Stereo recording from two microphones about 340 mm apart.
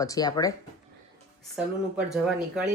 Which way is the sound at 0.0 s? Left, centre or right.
Centre.